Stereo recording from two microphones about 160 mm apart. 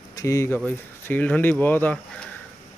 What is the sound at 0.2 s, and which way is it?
Speech, 20° left (ahead or behind).